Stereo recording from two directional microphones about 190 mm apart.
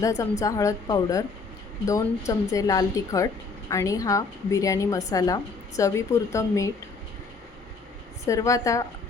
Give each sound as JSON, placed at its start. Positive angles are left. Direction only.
{"t": 0.0, "sound": "a woman's voice", "side_deg": 15}
{"t": 8.2, "sound": "a woman's voice", "side_deg": 15}